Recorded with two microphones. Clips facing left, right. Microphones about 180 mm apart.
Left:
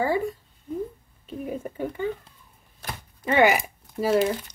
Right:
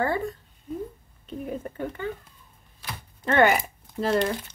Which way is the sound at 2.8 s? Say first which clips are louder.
Left 2 dB; 50° left (ahead or behind).